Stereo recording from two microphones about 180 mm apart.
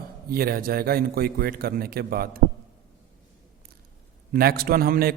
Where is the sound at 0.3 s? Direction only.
55° right (ahead or behind).